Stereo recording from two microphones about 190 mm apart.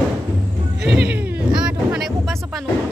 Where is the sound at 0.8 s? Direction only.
5° right (ahead or behind).